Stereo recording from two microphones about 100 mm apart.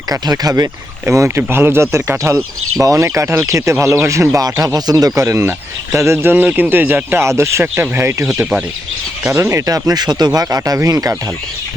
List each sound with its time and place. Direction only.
0.1 s speech: 40° right (ahead or behind)
1.0 s speech: 25° right (ahead or behind)
5.2 s speech: 25° right (ahead or behind)
9.3 s speech: 30° right (ahead or behind)